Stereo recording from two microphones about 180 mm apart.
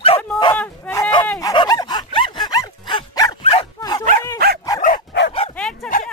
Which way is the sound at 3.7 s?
20° left (ahead or behind).